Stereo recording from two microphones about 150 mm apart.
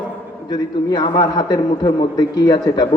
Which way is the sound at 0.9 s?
25° left (ahead or behind).